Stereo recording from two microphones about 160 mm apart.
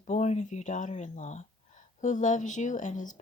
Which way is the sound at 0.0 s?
45° left (ahead or behind).